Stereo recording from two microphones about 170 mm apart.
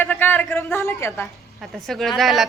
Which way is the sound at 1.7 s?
Centre (ahead or behind).